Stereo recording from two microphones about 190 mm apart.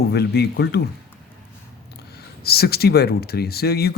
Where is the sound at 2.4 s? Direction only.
55° left (ahead or behind).